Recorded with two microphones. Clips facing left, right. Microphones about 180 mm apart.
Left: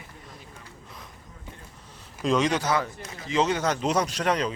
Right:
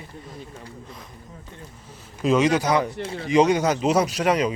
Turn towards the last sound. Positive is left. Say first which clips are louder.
# right 5 dB
turn(degrees=-10)  # may be behind; listen again after turning